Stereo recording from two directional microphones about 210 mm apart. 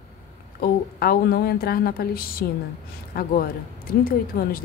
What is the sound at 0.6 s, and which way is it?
A woman's voice, 45° left (ahead or behind).